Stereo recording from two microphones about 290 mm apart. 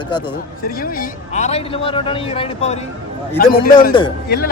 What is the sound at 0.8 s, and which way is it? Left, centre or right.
Speech, left.